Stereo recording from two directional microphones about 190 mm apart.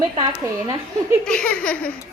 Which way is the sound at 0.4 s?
15° right (ahead or behind).